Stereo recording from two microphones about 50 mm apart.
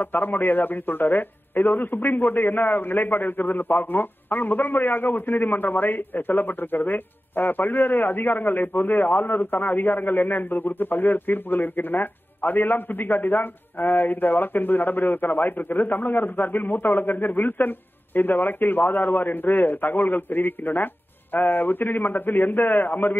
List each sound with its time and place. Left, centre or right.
0.0 s a man's voice: left